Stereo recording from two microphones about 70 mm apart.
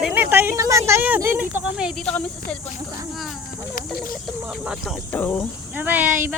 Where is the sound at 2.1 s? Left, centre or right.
Centre.